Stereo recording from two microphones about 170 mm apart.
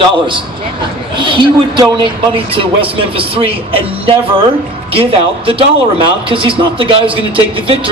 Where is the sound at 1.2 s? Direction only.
30° right (ahead or behind).